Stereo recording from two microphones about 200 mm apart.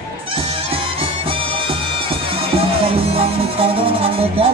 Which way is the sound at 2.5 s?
30° right (ahead or behind).